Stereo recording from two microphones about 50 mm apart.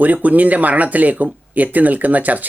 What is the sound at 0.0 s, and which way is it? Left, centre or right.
Speech, right.